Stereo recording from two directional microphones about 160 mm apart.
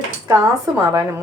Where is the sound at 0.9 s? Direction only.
20° right (ahead or behind).